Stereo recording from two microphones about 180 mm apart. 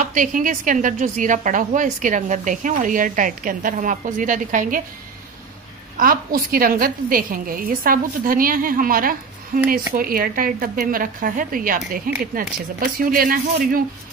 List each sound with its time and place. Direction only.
0.0 s a woman's voice: 45° right (ahead or behind)
5.9 s a woman's voice: 50° right (ahead or behind)